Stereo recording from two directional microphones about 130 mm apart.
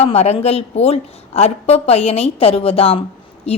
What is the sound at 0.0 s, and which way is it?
A woman's voice, 50° left (ahead or behind).